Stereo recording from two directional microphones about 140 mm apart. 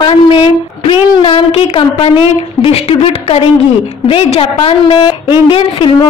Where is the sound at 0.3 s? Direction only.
40° left (ahead or behind).